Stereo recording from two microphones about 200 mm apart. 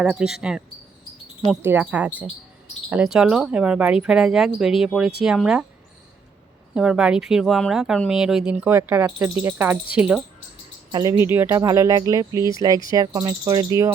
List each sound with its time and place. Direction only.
0.0 s speech: 5° right (ahead or behind)
6.7 s speech: 5° right (ahead or behind)
10.9 s speech: 20° right (ahead or behind)
12.5 s cricket: 20° right (ahead or behind)